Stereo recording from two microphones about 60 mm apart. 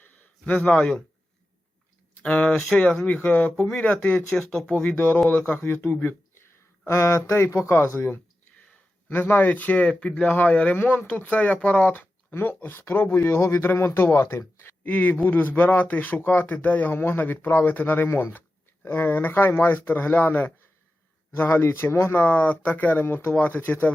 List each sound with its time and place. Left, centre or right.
0.0 s a sound: left
0.7 s speech: centre
2.2 s speech: left
4.8 s speech: left
5.5 s speech: left
6.4 s a sound: left
7.7 s speech: left
9.2 s speech: left
14.8 s speech: left
22.2 s speech: left